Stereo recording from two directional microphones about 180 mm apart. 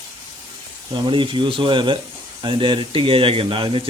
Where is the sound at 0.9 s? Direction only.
25° right (ahead or behind).